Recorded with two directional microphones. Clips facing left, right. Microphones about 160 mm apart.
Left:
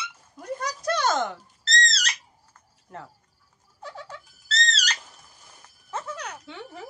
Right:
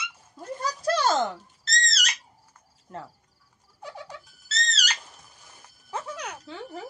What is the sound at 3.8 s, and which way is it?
Turkey, 15° right (ahead or behind).